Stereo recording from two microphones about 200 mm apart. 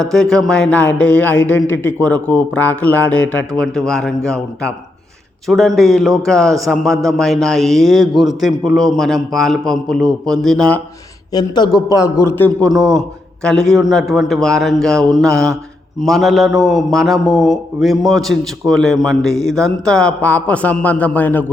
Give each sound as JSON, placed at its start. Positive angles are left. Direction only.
{"t": 0.1, "sound": "a man's voice", "side_deg": 0}
{"t": 11.3, "sound": "a man's voice", "side_deg": 20}